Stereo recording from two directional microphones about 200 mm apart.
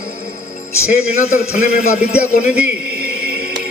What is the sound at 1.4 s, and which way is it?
Speech, 50° left (ahead or behind).